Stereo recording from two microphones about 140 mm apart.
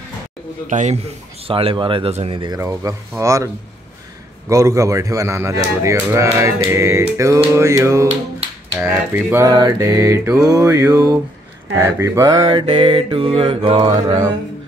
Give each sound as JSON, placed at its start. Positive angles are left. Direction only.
{"t": 0.7, "sound": "a man's voice", "side_deg": -60}
{"t": 1.5, "sound": "mantra", "side_deg": -40}
{"t": 2.6, "sound": "speech", "side_deg": -20}
{"t": 4.5, "sound": "speech", "side_deg": -25}
{"t": 8.7, "sound": "finger snapping", "side_deg": -15}
{"t": 9.5, "sound": "speech", "side_deg": -25}
{"t": 12.0, "sound": "mantra", "side_deg": -25}